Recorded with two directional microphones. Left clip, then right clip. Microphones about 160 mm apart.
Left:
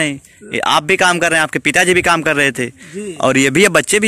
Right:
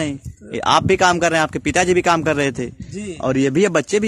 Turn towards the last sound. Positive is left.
turn(degrees=5)  # may be behind; listen again after turning